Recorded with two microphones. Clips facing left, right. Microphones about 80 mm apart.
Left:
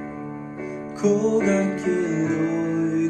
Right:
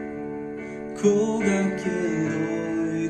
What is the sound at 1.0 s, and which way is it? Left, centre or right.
Music, centre.